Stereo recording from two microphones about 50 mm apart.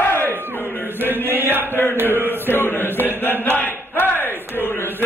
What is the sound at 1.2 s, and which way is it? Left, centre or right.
Chant, right.